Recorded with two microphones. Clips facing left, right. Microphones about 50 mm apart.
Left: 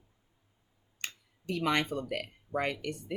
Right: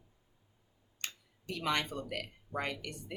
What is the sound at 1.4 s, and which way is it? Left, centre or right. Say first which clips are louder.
Speech: left 4 dB; left.